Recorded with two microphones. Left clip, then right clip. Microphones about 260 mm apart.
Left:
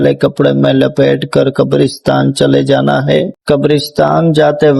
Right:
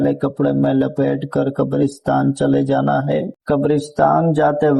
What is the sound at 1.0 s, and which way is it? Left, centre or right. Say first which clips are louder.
Speech: left 9 dB; left.